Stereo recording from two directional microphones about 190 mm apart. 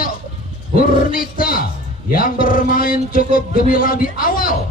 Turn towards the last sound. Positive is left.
turn(degrees=50)  # may be behind; listen again after turning